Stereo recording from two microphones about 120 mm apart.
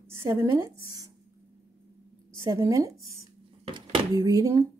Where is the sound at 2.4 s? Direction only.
25° right (ahead or behind).